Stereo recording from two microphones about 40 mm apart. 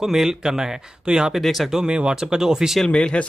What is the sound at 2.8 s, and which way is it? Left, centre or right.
Speech, left.